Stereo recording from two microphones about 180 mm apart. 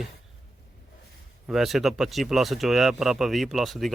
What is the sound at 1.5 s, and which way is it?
Speech, centre (ahead or behind).